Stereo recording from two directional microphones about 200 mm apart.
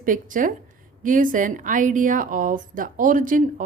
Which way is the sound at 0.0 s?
40° right (ahead or behind).